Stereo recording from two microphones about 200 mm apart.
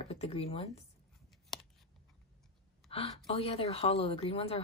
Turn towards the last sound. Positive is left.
turn(degrees=30)  # may be behind; listen again after turning